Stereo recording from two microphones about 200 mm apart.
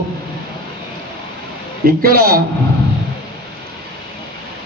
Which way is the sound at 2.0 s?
50° right (ahead or behind).